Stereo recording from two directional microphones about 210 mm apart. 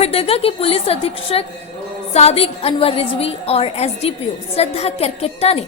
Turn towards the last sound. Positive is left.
turn(degrees=30)  # may be behind; listen again after turning